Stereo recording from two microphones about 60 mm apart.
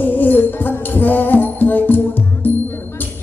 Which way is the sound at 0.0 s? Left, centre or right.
Left.